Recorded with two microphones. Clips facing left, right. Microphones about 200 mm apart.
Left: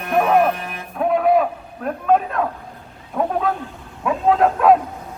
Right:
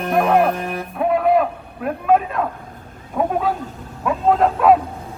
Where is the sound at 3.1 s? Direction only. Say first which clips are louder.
Right 1 dB; centre (ahead or behind).